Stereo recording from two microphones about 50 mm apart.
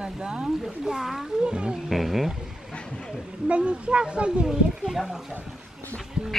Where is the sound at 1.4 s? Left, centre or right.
Centre.